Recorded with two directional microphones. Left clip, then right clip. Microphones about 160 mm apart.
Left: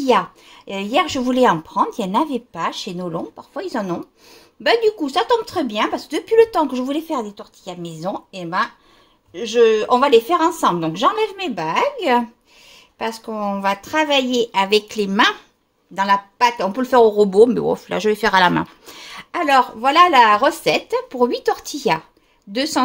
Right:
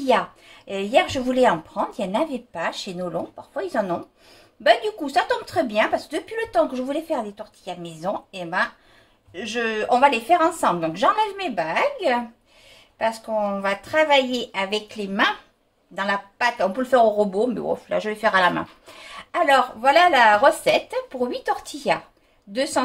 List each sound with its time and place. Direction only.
0.7 s a woman's voice: 70° left (ahead or behind); by 15.3 s 90° left
15.9 s speech: 75° left (ahead or behind)
19.0 s a woman's voice: 75° left (ahead or behind)